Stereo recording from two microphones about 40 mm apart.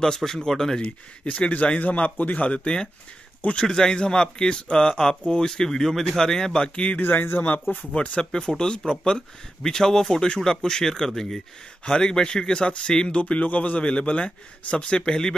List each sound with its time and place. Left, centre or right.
0.0 s speech: centre
0.7 s speech: left
1.8 s a man's voice: left
7.0 s a man's voice: left
7.7 s a man's voice: left